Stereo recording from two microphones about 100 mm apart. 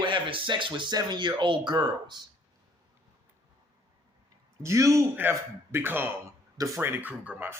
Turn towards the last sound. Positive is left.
turn(degrees=-15)  # may be behind; listen again after turning